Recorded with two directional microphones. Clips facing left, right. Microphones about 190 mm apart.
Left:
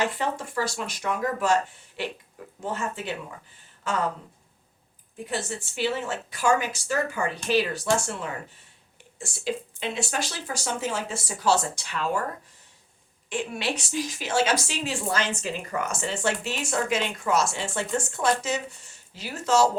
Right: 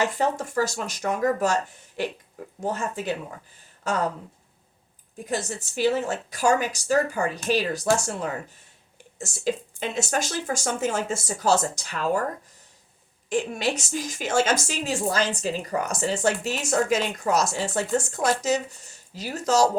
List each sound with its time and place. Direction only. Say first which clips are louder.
0.1 s a woman's voice: right 4 dB; 40° right (ahead or behind)
2.6 s a woman's voice: right 3 dB; 40° right (ahead or behind)
5.2 s a woman's voice: right 2 dB; 40° right (ahead or behind)
13.3 s a woman's voice: right 4 dB; 45° right (ahead or behind)